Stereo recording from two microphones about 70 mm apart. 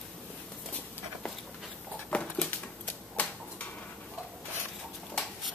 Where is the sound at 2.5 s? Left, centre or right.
Left.